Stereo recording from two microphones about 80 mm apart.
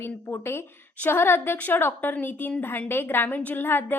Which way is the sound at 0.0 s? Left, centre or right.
Left.